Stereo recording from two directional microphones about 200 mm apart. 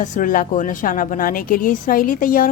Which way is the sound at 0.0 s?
40° left (ahead or behind).